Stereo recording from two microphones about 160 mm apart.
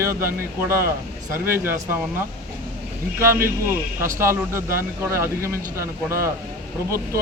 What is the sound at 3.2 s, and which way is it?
Speech, 15° right (ahead or behind).